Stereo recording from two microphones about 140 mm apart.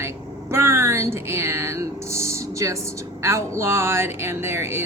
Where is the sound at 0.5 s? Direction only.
20° right (ahead or behind).